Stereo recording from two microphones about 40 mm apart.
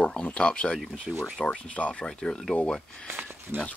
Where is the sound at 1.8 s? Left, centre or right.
Left.